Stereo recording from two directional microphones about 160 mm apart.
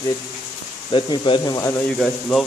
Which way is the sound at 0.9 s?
30° left (ahead or behind).